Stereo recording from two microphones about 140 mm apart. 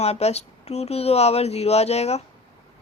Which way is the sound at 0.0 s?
50° left (ahead or behind).